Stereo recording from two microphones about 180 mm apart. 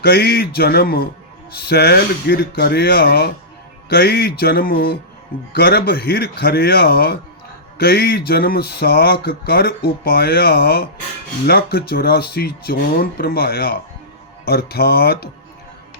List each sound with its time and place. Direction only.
0.0 s speech: 60° left (ahead or behind)